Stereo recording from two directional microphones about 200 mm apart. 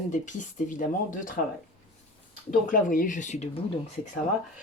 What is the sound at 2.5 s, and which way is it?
Speech, 40° left (ahead or behind).